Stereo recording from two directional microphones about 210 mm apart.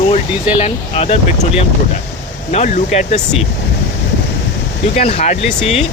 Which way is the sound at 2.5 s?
35° left (ahead or behind).